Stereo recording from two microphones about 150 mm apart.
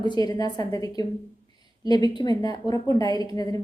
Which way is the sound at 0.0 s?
30° left (ahead or behind).